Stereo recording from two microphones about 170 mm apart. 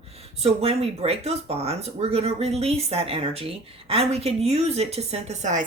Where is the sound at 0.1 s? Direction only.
35° right (ahead or behind).